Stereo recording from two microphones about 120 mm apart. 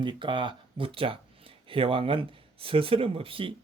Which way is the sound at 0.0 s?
40° right (ahead or behind).